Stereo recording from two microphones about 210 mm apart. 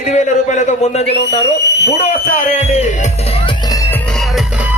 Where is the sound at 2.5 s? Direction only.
30° left (ahead or behind).